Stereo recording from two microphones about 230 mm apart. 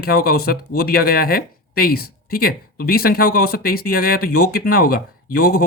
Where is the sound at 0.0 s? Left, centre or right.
Left.